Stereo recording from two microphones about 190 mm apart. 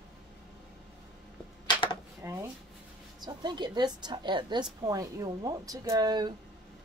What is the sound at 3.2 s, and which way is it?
A woman's voice, 20° right (ahead or behind).